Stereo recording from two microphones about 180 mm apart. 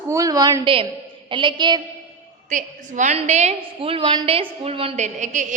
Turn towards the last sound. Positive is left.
turn(degrees=-45)  # may be behind; listen again after turning